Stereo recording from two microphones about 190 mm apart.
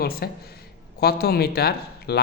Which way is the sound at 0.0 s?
55° left (ahead or behind).